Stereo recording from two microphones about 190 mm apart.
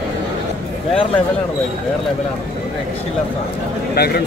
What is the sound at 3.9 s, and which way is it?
Speech, 55° left (ahead or behind).